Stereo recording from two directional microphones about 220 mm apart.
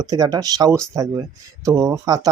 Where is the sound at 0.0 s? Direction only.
15° right (ahead or behind).